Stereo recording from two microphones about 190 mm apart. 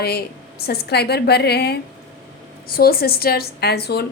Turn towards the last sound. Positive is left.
turn(degrees=55)  # may be behind; listen again after turning